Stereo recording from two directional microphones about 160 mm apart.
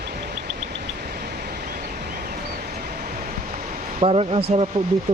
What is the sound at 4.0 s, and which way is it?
Speech, 35° right (ahead or behind).